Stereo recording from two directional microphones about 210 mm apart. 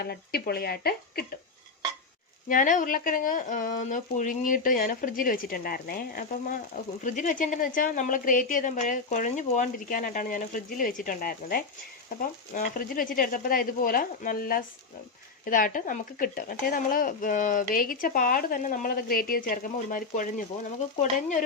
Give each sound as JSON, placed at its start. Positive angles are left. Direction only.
{"t": 0.0, "sound": "speech", "side_deg": 50}
{"t": 2.5, "sound": "speech", "side_deg": 40}